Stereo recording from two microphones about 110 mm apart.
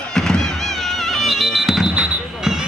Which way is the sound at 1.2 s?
Centre (ahead or behind).